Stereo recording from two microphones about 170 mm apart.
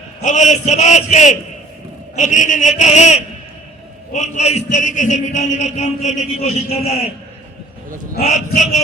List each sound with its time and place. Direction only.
0.2 s a man's voice: 45° left (ahead or behind)
8.5 s a man's voice: 45° left (ahead or behind)